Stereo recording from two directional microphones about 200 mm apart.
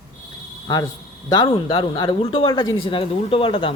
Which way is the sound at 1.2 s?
20° left (ahead or behind).